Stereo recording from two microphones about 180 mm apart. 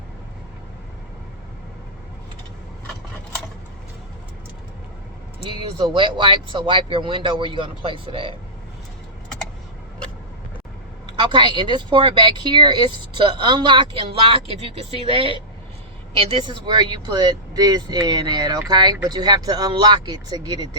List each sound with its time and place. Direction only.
5.5 s speech: 25° right (ahead or behind)
11.2 s speech: 25° right (ahead or behind)